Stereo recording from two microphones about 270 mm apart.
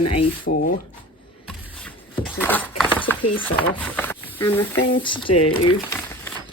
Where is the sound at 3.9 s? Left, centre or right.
Centre.